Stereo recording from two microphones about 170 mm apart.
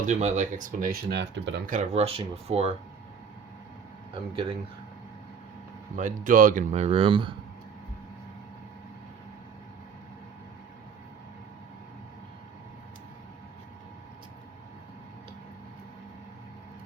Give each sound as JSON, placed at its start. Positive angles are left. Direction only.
{"t": 0.0, "sound": "speech", "side_deg": -45}
{"t": 1.6, "sound": "speech", "side_deg": -45}
{"t": 4.1, "sound": "speech", "side_deg": -35}
{"t": 6.0, "sound": "speech", "side_deg": -50}